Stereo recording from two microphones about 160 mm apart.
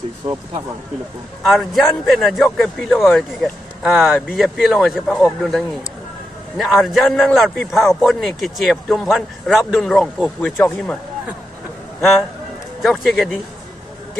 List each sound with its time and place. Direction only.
0.2 s speech: 35° right (ahead or behind)
1.6 s a man's voice: centre (ahead or behind)
12.8 s a man's voice: centre (ahead or behind)